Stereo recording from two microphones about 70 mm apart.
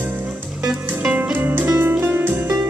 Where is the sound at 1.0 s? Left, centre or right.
Right.